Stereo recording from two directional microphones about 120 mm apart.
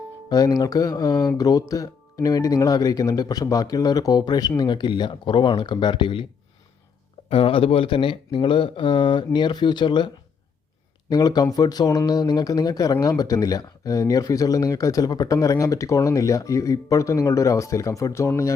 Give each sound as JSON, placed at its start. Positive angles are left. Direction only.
{"t": 0.3, "sound": "speech", "side_deg": 30}
{"t": 7.3, "sound": "speech", "side_deg": 50}
{"t": 11.1, "sound": "speech", "side_deg": 35}